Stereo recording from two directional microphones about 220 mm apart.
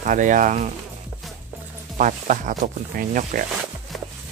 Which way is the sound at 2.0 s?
35° right (ahead or behind).